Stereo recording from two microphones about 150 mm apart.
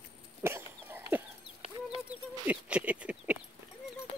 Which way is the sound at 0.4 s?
15° right (ahead or behind).